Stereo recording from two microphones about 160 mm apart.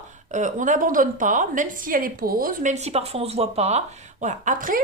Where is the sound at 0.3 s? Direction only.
50° right (ahead or behind).